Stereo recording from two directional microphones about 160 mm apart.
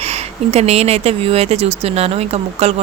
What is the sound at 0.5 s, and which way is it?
Speech, 40° right (ahead or behind).